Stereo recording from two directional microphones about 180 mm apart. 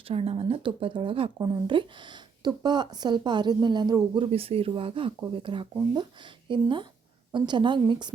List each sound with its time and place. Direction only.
0.1 s speech: 35° right (ahead or behind)